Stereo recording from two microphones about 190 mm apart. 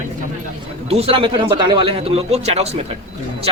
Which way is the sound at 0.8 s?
30° right (ahead or behind).